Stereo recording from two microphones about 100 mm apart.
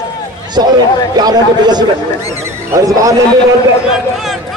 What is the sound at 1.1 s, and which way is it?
A man's voice, 45° right (ahead or behind).